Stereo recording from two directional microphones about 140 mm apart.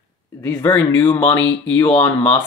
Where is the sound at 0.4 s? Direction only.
15° left (ahead or behind).